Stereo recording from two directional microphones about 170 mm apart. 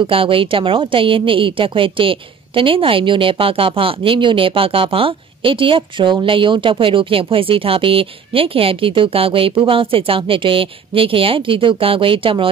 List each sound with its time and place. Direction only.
0.0 s a woman's voice: 30° right (ahead or behind)